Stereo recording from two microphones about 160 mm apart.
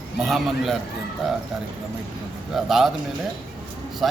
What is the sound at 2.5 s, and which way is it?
Speech, centre (ahead or behind).